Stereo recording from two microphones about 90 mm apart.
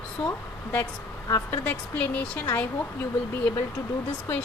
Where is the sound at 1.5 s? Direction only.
20° left (ahead or behind).